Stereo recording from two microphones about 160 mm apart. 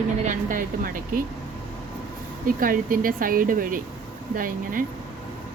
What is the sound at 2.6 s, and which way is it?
A woman's voice, 60° right (ahead or behind).